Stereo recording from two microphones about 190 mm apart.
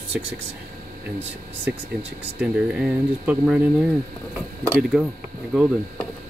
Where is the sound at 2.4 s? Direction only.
5° right (ahead or behind).